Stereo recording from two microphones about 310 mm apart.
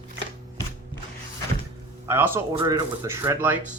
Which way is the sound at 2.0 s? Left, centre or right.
Centre.